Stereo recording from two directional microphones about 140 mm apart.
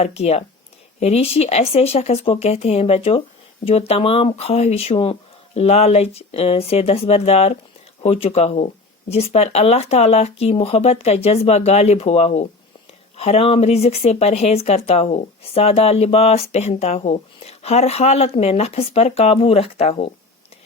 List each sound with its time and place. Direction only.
0.0 s speech: 45° left (ahead or behind)